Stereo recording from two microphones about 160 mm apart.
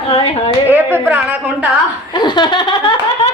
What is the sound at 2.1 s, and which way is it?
Laughter, 25° left (ahead or behind).